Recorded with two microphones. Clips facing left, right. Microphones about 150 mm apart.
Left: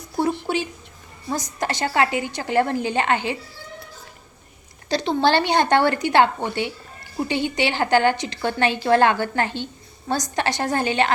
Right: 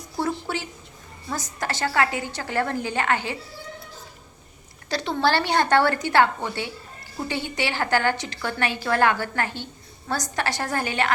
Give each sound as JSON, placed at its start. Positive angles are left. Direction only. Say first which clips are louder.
{"t": 0.2, "sound": "a sound", "louder": "left 5 dB", "side_deg": 20}
{"t": 1.3, "sound": "a woman's voice", "louder": "left 4 dB", "side_deg": 20}
{"t": 4.9, "sound": "a woman's voice", "louder": "left 3 dB", "side_deg": 20}